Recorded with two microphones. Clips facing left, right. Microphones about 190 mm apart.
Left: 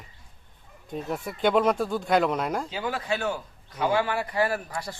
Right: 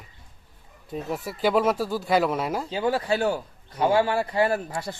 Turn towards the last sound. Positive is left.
turn(degrees=-25)  # may be behind; listen again after turning